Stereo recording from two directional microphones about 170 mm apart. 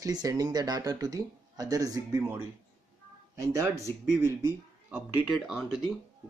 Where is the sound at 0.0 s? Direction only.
20° right (ahead or behind).